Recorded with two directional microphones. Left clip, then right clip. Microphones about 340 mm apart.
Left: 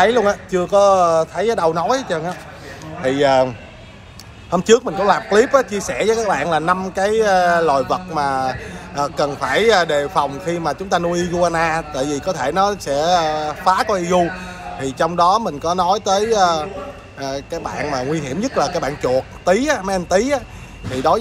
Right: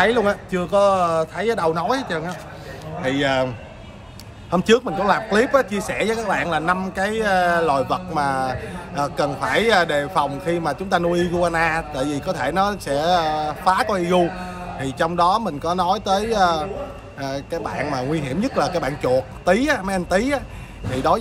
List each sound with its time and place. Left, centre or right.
0.0 s speech: centre